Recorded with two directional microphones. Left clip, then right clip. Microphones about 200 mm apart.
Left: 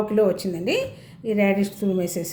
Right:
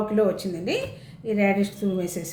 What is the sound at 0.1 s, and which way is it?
Speech, 30° left (ahead or behind).